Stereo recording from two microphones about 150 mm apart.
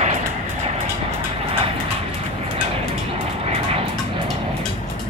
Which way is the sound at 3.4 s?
45° right (ahead or behind).